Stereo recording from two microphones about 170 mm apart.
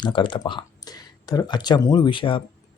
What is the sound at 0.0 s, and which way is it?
Speech, 30° left (ahead or behind).